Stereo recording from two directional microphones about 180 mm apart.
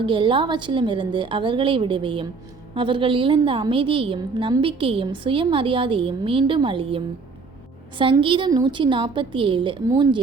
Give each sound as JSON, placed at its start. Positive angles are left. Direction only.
{"t": 0.0, "sound": "a woman's voice", "side_deg": -30}